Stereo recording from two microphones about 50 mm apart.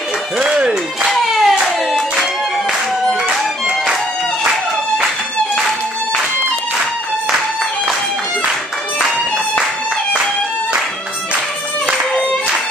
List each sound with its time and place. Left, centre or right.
0.5 s music: centre
1.0 s hands: centre
3.3 s music: centre